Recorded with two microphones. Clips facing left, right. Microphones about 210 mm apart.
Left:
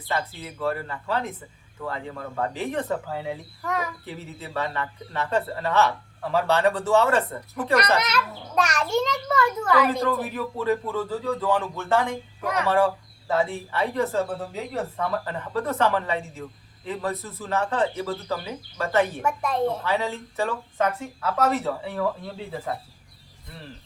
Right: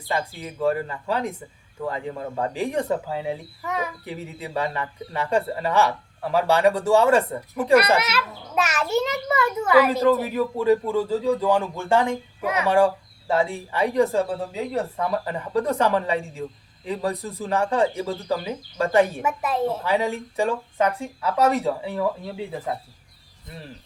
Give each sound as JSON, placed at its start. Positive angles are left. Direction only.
{"t": 0.1, "sound": "speech", "side_deg": -15}
{"t": 3.6, "sound": "speech", "side_deg": 0}
{"t": 4.0, "sound": "speech", "side_deg": -15}